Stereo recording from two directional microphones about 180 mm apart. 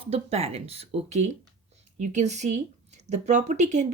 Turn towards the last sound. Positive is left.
turn(degrees=-40)  # may be behind; listen again after turning